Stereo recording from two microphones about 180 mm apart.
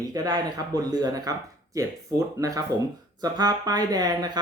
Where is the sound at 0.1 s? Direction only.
20° right (ahead or behind).